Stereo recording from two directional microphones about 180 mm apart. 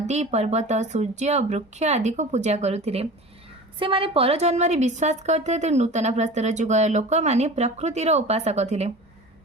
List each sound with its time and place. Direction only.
0.0 s a woman's voice: 40° right (ahead or behind)